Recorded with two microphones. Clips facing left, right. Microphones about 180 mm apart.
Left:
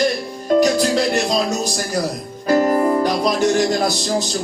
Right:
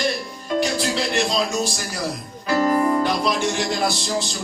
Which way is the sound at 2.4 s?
45° left (ahead or behind).